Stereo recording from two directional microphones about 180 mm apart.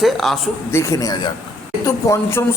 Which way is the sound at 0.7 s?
15° left (ahead or behind).